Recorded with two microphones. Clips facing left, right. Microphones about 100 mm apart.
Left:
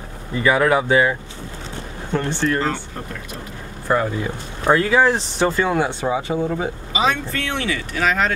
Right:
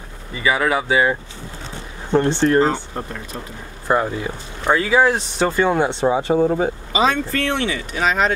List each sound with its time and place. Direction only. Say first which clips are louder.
0.3 s speech: left 2 dB; centre (ahead or behind)
2.1 s speech: right 6 dB; 30° right (ahead or behind)
3.8 s speech: right 1 dB; 15° right (ahead or behind)
4.6 s speech: even; 5° right (ahead or behind)
5.6 s speech: right 3 dB; 20° right (ahead or behind)
6.1 s speech: right 5 dB; 35° right (ahead or behind)
7.7 s speech: even; 20° right (ahead or behind)